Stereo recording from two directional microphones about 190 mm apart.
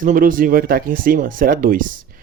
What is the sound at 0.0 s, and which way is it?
Speech, 45° right (ahead or behind).